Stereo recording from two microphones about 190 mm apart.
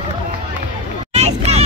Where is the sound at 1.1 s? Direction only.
35° right (ahead or behind).